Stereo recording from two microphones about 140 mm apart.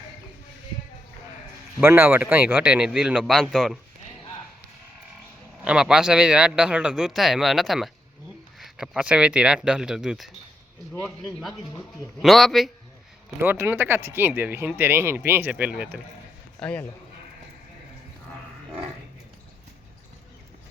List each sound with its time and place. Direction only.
1.8 s speech: 15° right (ahead or behind); by 3.8 s centre (ahead or behind)
5.6 s speech: 5° right (ahead or behind)
13.4 s speech: 15° right (ahead or behind)
16.6 s speech: 10° left (ahead or behind)